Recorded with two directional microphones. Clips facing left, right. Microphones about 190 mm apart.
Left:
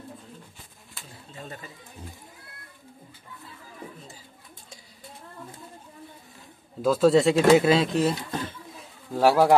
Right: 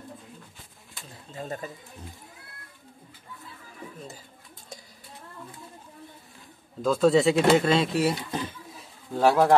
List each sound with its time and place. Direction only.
1.4 s speech: 40° right (ahead or behind)
6.8 s speech: centre (ahead or behind)
9.1 s speech: 5° left (ahead or behind)